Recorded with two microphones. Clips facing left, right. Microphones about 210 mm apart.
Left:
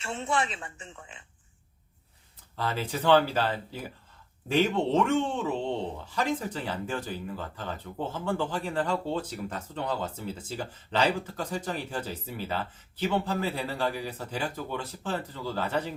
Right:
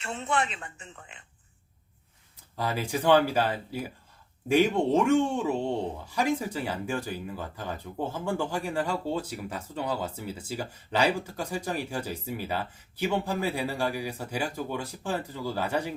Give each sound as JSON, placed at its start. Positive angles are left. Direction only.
{"t": 0.6, "sound": "speech", "side_deg": -35}
{"t": 2.6, "sound": "speech", "side_deg": -10}